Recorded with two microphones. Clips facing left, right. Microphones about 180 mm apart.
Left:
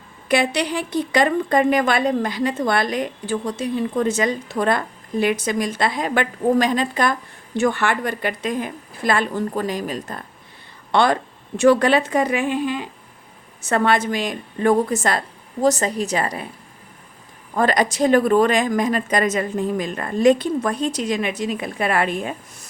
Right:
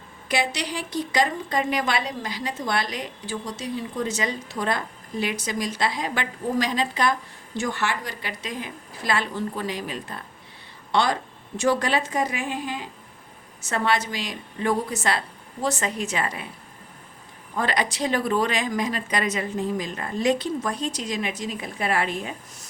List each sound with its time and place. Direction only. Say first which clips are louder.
0.3 s a woman's voice: left 7 dB; 55° left (ahead or behind)
10.9 s a woman's voice: left 5 dB; 55° left (ahead or behind); by 16.5 s 40° left (ahead or behind)
17.5 s a woman's voice: left 7 dB; 45° left (ahead or behind)